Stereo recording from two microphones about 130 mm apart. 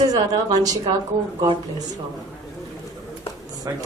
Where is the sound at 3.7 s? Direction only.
25° right (ahead or behind).